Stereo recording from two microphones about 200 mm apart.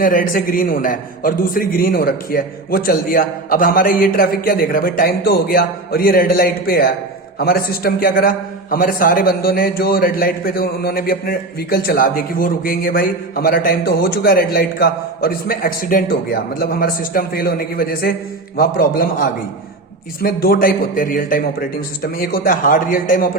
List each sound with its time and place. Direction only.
0.0 s a man's voice: 45° left (ahead or behind)